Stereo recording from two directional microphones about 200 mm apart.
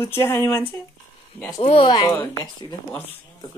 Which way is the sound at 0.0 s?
10° left (ahead or behind).